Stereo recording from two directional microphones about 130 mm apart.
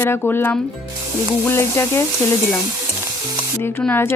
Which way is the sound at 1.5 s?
20° left (ahead or behind).